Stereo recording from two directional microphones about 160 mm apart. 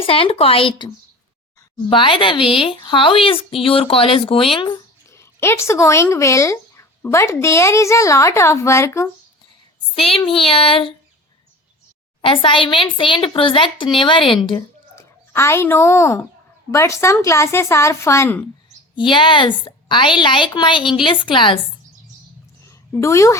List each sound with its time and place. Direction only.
0.0 s a woman's voice: 35° left (ahead or behind)
1.9 s a woman's voice: 35° left (ahead or behind)
5.1 s speech: 15° left (ahead or behind)
9.9 s a woman's voice: 35° left (ahead or behind)
12.2 s a woman's voice: 30° left (ahead or behind)
14.9 s speech: 15° left (ahead or behind)
18.9 s a woman's voice: 30° left (ahead or behind)
22.9 s a woman's voice: 20° left (ahead or behind)